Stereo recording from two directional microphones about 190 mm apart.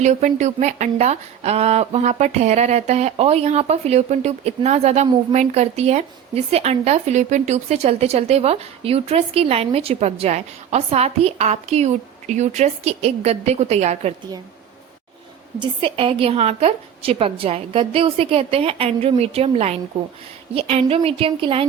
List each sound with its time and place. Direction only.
0.0 s speech: 40° right (ahead or behind)
15.5 s a woman's voice: 25° right (ahead or behind)